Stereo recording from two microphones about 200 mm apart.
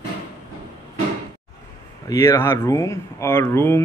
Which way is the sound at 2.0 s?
15° left (ahead or behind).